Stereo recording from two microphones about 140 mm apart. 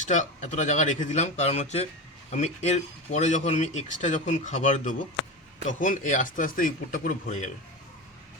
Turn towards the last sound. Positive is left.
turn(degrees=60)  # may be behind; listen again after turning